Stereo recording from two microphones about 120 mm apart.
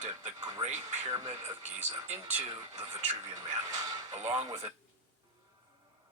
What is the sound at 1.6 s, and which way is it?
Speech, 70° right (ahead or behind).